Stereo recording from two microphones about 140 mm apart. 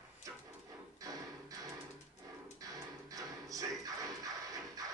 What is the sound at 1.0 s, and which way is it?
Music, 25° right (ahead or behind).